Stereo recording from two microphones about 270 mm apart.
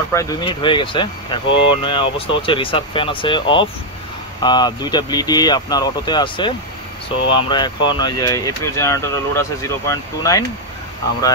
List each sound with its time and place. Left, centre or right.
0.1 s speech: centre